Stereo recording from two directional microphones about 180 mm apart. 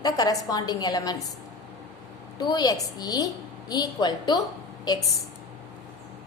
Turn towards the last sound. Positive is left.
turn(degrees=20)  # may be behind; listen again after turning